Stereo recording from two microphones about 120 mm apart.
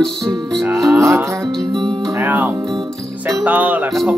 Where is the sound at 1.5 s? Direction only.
5° left (ahead or behind).